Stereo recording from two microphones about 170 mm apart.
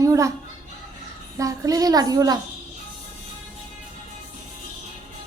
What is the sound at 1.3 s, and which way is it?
A woman's voice, 20° right (ahead or behind).